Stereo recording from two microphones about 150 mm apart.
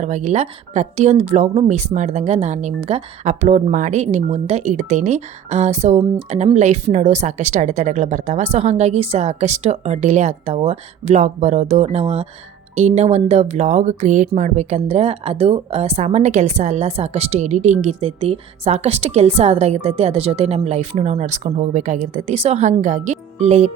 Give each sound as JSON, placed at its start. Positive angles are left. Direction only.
{"t": 0.0, "sound": "speech", "side_deg": -50}